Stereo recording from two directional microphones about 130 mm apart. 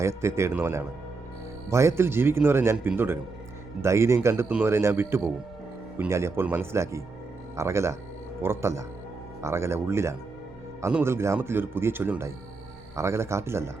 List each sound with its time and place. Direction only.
0.0 s speech: 20° right (ahead or behind)